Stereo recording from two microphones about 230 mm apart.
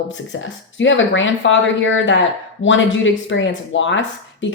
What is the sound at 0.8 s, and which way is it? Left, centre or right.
A woman's voice, left.